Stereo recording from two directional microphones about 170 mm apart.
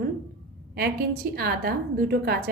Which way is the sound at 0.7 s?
65° right (ahead or behind).